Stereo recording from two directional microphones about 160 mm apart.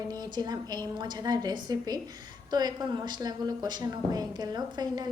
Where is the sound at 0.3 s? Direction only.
25° right (ahead or behind).